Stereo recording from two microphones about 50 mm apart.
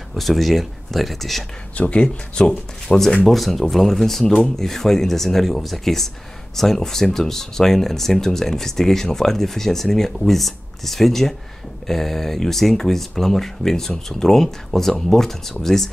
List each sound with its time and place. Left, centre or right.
0.1 s speech: centre
1.8 s speech: left
3.3 s speech: centre